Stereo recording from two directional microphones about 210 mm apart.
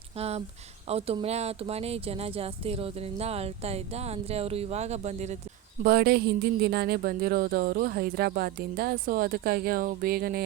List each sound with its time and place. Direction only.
0.2 s speech: 30° right (ahead or behind)
5.8 s speech: 50° right (ahead or behind)